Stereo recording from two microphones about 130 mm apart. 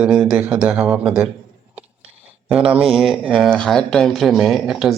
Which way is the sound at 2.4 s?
10° right (ahead or behind).